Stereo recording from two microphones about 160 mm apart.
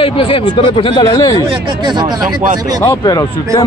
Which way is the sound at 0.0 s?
35° left (ahead or behind).